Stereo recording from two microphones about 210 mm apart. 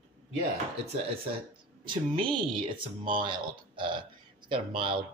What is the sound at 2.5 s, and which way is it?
Speech, 25° right (ahead or behind).